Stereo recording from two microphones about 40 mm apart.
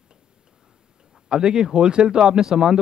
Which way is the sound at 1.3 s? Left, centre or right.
Centre.